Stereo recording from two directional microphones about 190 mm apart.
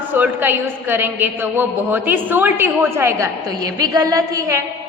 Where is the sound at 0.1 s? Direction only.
10° right (ahead or behind).